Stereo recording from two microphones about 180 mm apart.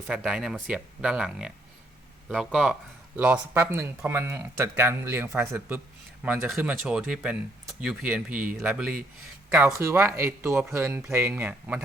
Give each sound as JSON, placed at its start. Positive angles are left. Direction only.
{"t": 0.1, "sound": "speech", "side_deg": -5}